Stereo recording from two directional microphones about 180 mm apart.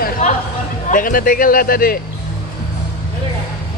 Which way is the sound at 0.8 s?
50° left (ahead or behind).